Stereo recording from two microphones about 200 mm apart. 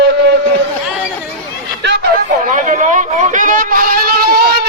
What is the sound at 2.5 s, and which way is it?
A man's voice, 40° right (ahead or behind).